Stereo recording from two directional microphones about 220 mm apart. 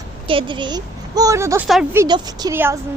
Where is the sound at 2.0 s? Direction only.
20° right (ahead or behind).